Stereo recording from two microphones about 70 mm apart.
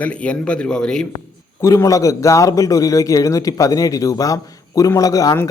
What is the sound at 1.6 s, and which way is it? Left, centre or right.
A man's voice, left.